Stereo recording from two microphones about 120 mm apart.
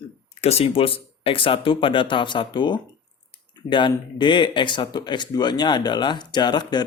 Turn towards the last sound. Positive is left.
turn(degrees=35)  # may be behind; listen again after turning